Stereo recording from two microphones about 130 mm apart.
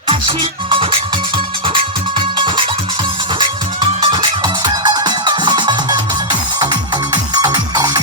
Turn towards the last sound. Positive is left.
turn(degrees=-30)  # may be behind; listen again after turning